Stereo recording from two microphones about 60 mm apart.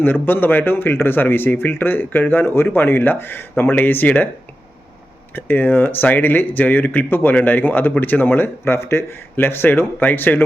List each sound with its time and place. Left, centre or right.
0.0 s speech: left
5.3 s speech: left